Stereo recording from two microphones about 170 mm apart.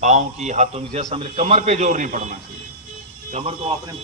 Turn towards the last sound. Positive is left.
turn(degrees=-35)  # may be behind; listen again after turning